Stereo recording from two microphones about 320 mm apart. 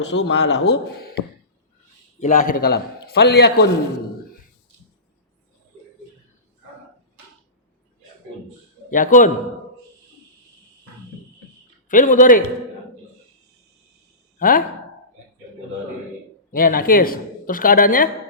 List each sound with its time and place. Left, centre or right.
0.1 s speech: left
2.2 s speech: left
8.9 s speech: left
11.9 s speech: left
14.3 s speech: left
16.5 s speech: left